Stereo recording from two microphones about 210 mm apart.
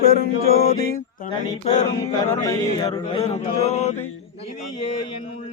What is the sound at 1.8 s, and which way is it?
Chant, 15° left (ahead or behind).